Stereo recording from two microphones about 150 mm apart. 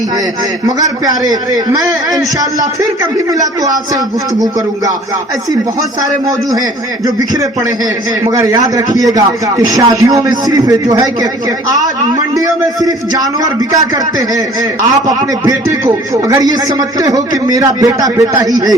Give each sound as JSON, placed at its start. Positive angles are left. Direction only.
{"t": 0.8, "sound": "speech", "side_deg": -25}
{"t": 8.2, "sound": "speech", "side_deg": -20}
{"t": 12.5, "sound": "speech", "side_deg": -25}
{"t": 14.8, "sound": "speech", "side_deg": -25}